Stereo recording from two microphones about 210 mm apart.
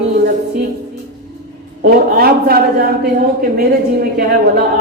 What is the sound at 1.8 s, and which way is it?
A man's voice, 45° right (ahead or behind).